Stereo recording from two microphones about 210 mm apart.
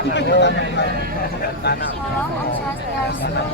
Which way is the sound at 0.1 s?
55° left (ahead or behind).